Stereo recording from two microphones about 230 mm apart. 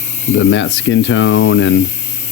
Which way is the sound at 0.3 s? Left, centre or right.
Left.